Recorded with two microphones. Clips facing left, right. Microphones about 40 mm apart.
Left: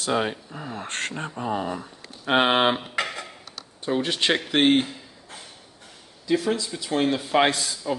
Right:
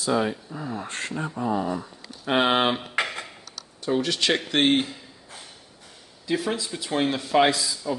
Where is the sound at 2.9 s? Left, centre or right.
Right.